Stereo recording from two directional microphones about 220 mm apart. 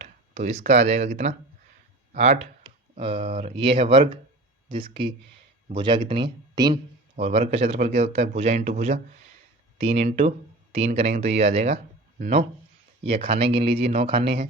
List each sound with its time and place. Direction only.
0.0 s a sound: 30° right (ahead or behind)
0.6 s speech: 30° right (ahead or behind)
9.7 s speech: 30° right (ahead or behind)